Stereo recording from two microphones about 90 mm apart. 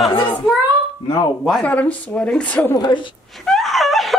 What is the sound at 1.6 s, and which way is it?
A woman's voice, 15° left (ahead or behind).